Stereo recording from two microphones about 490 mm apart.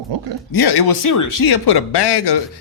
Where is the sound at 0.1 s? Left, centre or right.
Right.